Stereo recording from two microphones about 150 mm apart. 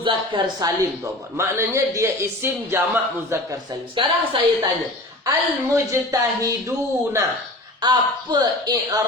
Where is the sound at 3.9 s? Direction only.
30° right (ahead or behind).